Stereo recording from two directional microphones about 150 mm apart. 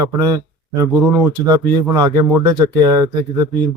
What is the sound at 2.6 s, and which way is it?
Speech, 25° right (ahead or behind).